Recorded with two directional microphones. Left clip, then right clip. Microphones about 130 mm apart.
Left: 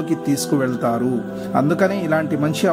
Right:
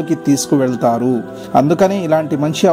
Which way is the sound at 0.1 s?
30° right (ahead or behind).